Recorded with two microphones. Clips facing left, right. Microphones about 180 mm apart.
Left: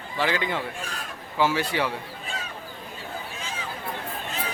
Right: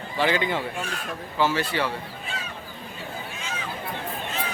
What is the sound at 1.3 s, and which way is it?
Speech, 10° left (ahead or behind).